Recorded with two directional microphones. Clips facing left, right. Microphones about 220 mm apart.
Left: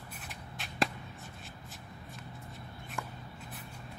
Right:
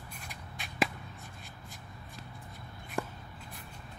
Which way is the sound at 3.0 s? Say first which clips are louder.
Right 7 dB; 30° right (ahead or behind).